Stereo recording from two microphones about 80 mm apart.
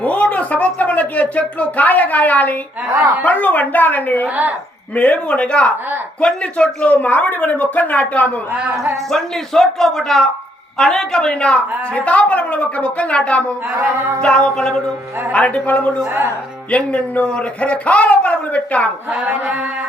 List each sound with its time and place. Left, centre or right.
0.0 s a woman's voice: centre
9.0 s a man's voice: centre
13.7 s a sound: right
14.2 s a woman's voice: centre
19.1 s speech: centre